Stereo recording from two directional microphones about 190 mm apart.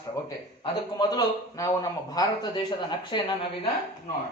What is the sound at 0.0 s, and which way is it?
A man's voice, 20° left (ahead or behind).